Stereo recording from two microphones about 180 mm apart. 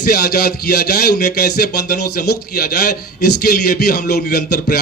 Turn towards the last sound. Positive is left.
turn(degrees=60)  # may be behind; listen again after turning